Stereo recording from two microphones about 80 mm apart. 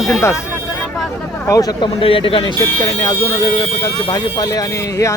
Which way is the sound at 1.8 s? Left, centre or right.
Left.